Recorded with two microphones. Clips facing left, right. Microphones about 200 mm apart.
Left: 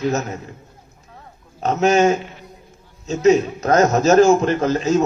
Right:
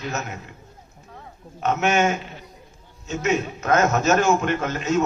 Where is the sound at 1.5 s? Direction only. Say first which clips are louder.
Left 5 dB; 35° left (ahead or behind).